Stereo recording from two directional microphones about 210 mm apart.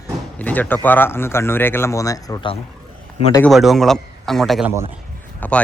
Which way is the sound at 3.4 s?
Centre (ahead or behind).